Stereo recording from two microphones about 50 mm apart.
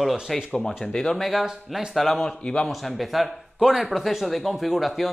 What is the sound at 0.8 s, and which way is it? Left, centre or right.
Speech, centre.